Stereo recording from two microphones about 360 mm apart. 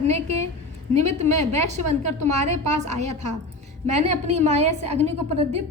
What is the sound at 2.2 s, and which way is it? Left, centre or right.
A woman's voice, centre.